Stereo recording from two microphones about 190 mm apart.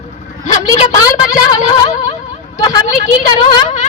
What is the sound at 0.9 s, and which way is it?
Speech, 20° left (ahead or behind).